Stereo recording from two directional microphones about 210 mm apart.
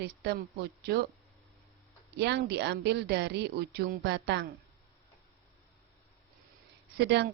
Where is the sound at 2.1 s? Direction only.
55° right (ahead or behind).